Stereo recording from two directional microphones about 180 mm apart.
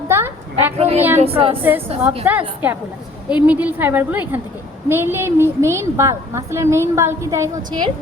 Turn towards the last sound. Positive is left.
turn(degrees=-25)  # may be behind; listen again after turning